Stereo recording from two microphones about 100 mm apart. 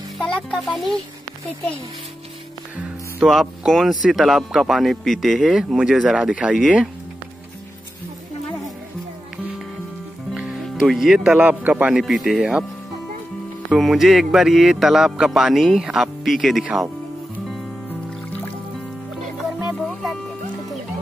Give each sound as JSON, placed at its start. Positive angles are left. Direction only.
{"t": 0.5, "sound": "speech", "side_deg": 0}
{"t": 3.3, "sound": "speech", "side_deg": 0}
{"t": 10.3, "sound": "speech", "side_deg": -5}
{"t": 12.0, "sound": "speech", "side_deg": 0}
{"t": 13.7, "sound": "speech", "side_deg": 0}
{"t": 19.6, "sound": "music", "side_deg": 0}